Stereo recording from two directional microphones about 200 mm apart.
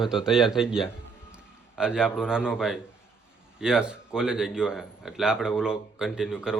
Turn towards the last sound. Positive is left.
turn(degrees=-5)  # may be behind; listen again after turning